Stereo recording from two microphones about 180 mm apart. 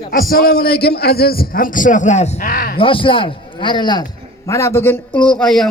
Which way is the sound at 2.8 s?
30° left (ahead or behind).